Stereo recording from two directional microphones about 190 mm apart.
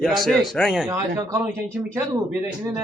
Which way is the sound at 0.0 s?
Centre (ahead or behind).